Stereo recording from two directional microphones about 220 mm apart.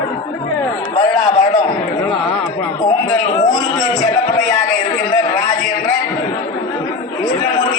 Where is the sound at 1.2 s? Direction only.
20° left (ahead or behind).